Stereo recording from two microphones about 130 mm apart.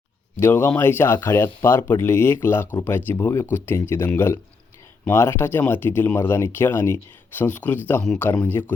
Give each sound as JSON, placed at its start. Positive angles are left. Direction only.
{"t": 0.3, "sound": "speech", "side_deg": 15}